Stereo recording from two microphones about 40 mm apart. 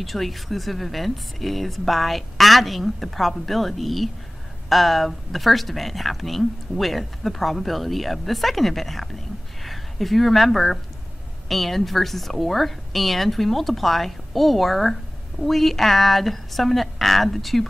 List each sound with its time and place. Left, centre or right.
0.0 s speech: centre